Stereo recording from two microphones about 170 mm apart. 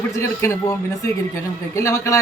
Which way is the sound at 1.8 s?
15° left (ahead or behind).